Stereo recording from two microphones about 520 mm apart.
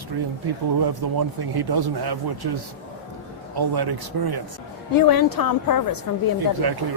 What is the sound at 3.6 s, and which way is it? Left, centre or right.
Speech, right.